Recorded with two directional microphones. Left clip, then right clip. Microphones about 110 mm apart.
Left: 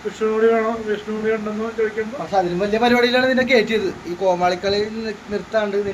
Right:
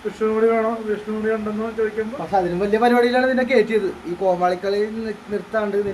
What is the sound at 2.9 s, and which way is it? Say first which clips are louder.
Speech: left 1 dB; 10° left (ahead or behind).